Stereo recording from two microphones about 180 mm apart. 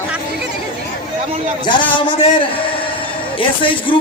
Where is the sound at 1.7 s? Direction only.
25° left (ahead or behind).